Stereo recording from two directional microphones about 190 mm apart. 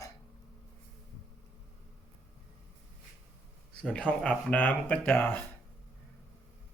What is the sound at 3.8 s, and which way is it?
Speech, 5° left (ahead or behind).